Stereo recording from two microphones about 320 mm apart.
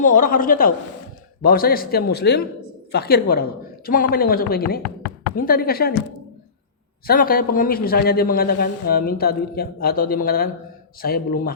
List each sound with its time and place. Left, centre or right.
0.0 s a man's voice: left
4.8 s a sound: left
5.4 s a man's voice: left
7.1 s a man's voice: left